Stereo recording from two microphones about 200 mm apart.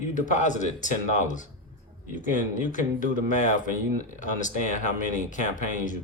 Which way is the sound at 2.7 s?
40° left (ahead or behind).